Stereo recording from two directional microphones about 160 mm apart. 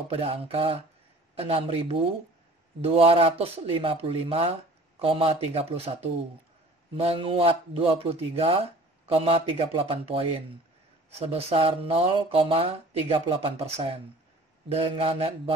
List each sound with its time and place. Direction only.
0.1 s speech: 35° right (ahead or behind)
7.0 s speech: 35° right (ahead or behind)